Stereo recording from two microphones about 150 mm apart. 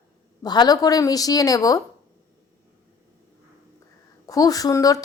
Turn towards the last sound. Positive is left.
turn(degrees=25)  # may be behind; listen again after turning